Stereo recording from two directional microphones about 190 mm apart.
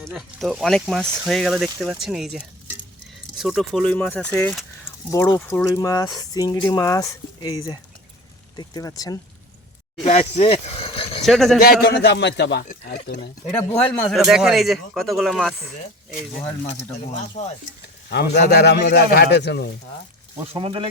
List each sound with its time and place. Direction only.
0.1 s speech: centre (ahead or behind)
3.4 s speech: centre (ahead or behind); by 9.1 s 20° left (ahead or behind)
10.0 s speech: 35° left (ahead or behind)
11.2 s speech: centre (ahead or behind)
11.6 s speech: 50° left (ahead or behind)
13.5 s speech: 5° left (ahead or behind)
17.4 s speech: 40° left (ahead or behind)
18.4 s speech: 60° left (ahead or behind)
20.6 s speech: 30° right (ahead or behind)